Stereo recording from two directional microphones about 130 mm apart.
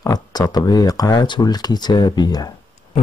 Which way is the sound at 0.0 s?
30° left (ahead or behind).